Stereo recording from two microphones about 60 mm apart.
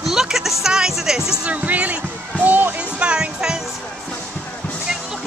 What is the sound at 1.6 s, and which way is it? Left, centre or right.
Music, right.